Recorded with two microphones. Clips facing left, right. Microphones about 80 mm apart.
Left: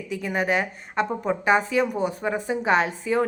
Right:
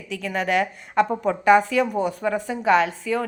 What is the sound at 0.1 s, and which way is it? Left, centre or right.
A woman's voice, centre.